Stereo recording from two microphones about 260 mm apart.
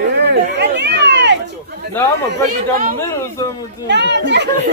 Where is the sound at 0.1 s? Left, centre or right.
Right.